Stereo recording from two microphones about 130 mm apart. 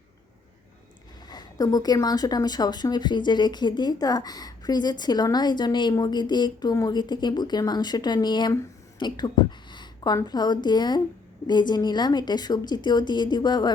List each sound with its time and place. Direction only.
1.3 s speech: 30° left (ahead or behind)
9.0 s a sound: 35° left (ahead or behind)
10.2 s speech: 30° left (ahead or behind)